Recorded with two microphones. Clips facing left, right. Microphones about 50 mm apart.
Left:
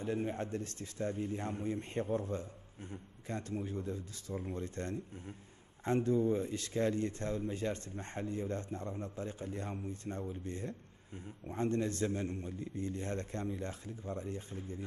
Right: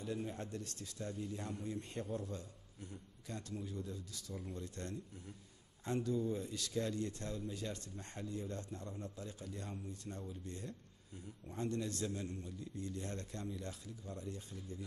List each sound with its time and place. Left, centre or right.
0.0 s speech: left